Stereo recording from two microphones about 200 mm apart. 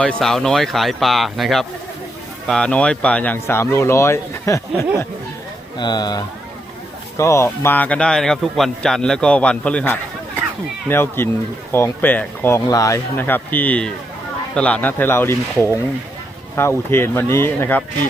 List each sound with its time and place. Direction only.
0.0 s a man's voice: 5° left (ahead or behind)